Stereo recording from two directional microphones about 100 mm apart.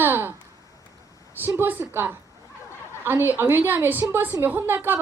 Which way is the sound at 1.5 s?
20° right (ahead or behind).